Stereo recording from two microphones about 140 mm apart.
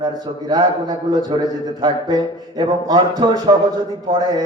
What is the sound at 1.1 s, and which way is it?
A man's voice, 30° right (ahead or behind).